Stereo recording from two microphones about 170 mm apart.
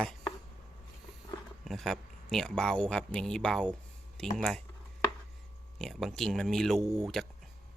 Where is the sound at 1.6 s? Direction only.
Centre (ahead or behind).